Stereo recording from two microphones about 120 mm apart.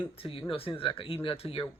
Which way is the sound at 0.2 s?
50° left (ahead or behind).